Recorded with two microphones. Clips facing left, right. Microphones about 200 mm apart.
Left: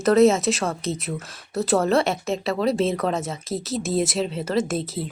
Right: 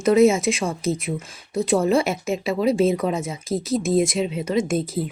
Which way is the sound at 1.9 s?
Centre (ahead or behind).